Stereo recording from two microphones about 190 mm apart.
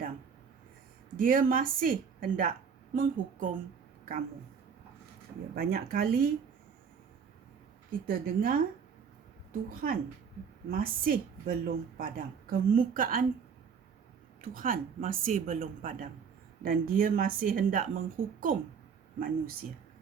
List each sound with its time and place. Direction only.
1.1 s a woman's voice: 45° right (ahead or behind)
5.5 s a woman's voice: 50° right (ahead or behind)
8.0 s a woman's voice: 50° right (ahead or behind)
14.4 s a woman's voice: 45° right (ahead or behind)